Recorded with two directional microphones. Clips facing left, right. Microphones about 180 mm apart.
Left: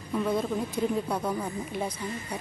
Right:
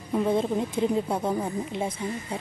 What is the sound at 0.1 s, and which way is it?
A woman's voice, 25° right (ahead or behind).